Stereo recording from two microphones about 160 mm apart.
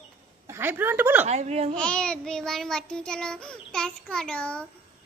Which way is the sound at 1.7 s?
5° left (ahead or behind).